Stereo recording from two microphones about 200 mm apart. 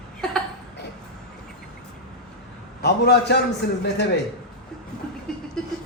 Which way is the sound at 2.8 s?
55° left (ahead or behind).